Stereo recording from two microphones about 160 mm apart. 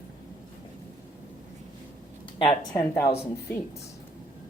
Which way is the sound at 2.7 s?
15° left (ahead or behind).